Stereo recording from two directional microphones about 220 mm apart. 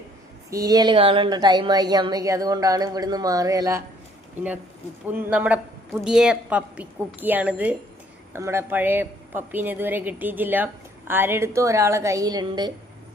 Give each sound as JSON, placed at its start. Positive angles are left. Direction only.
{"t": 0.5, "sound": "a woman's voice", "side_deg": -15}
{"t": 5.0, "sound": "a woman's voice", "side_deg": -10}